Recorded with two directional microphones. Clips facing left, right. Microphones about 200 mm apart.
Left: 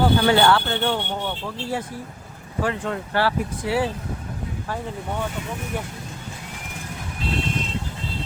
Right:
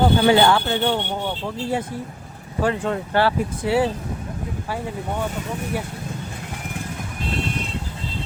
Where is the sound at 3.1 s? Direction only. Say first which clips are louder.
Right 2 dB; 25° right (ahead or behind).